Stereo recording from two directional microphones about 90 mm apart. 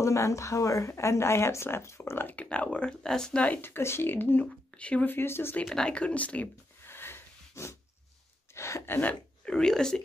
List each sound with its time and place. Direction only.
0.0 s speech: 35° left (ahead or behind); by 5.1 s 15° left (ahead or behind)
5.1 s speech: 25° left (ahead or behind)
5.7 s a sound: 10° left (ahead or behind); by 7.7 s 30° left (ahead or behind)
8.5 s speech: 30° left (ahead or behind)
9.1 s speech: 10° left (ahead or behind)